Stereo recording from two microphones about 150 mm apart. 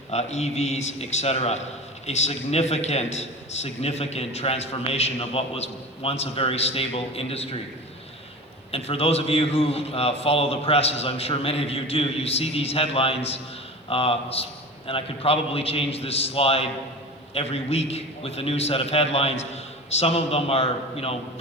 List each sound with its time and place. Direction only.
0.1 s a man's voice: 50° left (ahead or behind)
8.7 s a man's voice: 40° left (ahead or behind)